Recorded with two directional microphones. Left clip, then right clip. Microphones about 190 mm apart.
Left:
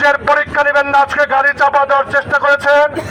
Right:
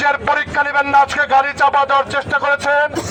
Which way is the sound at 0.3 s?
30° right (ahead or behind).